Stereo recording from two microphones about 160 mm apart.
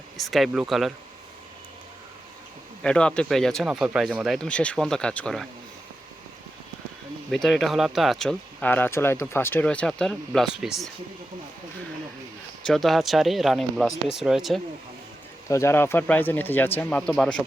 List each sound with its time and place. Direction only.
0.2 s speech: centre (ahead or behind)
2.8 s speech: 5° left (ahead or behind)
7.3 s speech: centre (ahead or behind)
12.6 s speech: centre (ahead or behind)
15.4 s speech: 15° left (ahead or behind)